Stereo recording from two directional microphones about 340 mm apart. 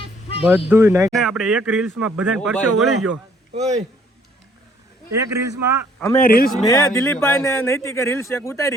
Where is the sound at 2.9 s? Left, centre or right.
Right.